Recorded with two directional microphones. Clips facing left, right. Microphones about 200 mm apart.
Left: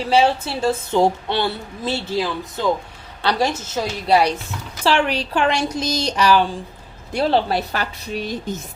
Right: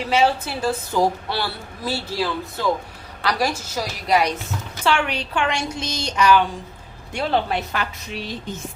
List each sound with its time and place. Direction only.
0.1 s a woman's voice: 30° left (ahead or behind)